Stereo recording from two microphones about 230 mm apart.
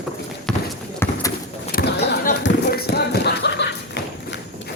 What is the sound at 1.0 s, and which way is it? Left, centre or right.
Bird, centre.